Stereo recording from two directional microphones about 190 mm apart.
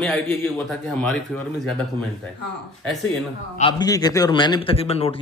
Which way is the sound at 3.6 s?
20° left (ahead or behind).